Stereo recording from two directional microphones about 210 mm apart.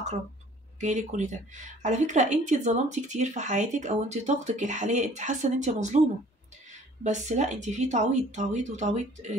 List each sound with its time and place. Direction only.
0.7 s speech: 35° right (ahead or behind)
7.0 s speech: 35° right (ahead or behind)